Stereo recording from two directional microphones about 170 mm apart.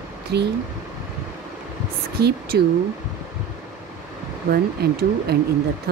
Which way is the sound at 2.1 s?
70° right (ahead or behind).